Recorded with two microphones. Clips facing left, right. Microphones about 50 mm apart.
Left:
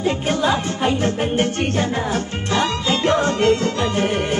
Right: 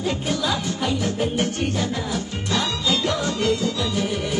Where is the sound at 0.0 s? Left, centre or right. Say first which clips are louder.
Left 5 dB; left.